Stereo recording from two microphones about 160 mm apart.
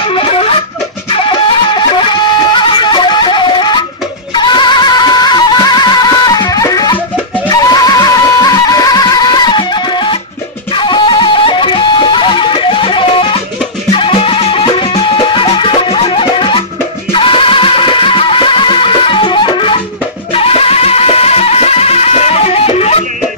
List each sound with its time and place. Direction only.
0.1 s music: 35° left (ahead or behind)
1.7 s music: 30° left (ahead or behind)